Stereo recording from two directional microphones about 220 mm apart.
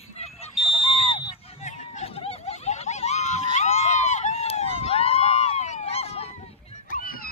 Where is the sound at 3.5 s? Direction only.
30° left (ahead or behind).